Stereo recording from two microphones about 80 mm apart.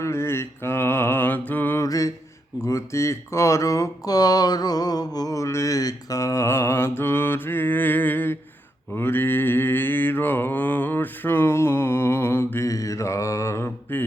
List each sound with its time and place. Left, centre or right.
0.0 s mantra: left
1.8 s mantra: left
2.6 s speech: left
9.0 s mantra: left